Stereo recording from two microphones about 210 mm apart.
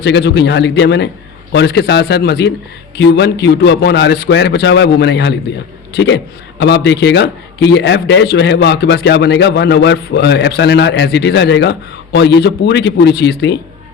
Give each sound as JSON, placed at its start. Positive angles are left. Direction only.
{"t": 0.0, "sound": "a man's voice", "side_deg": 55}
{"t": 6.6, "sound": "a man's voice", "side_deg": 55}